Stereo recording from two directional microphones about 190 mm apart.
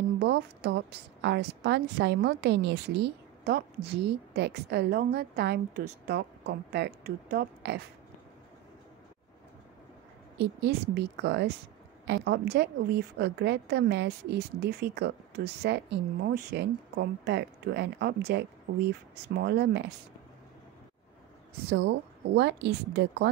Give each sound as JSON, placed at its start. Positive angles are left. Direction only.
{"t": 0.2, "sound": "a woman's voice", "side_deg": -65}
{"t": 10.3, "sound": "a woman's voice", "side_deg": -65}
{"t": 21.6, "sound": "a woman's voice", "side_deg": -75}